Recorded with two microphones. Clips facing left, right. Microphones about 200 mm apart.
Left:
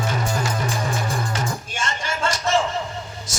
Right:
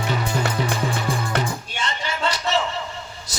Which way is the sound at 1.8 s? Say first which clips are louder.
Even; 45° left (ahead or behind).